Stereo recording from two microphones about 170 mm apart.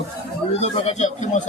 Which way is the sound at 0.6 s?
40° left (ahead or behind).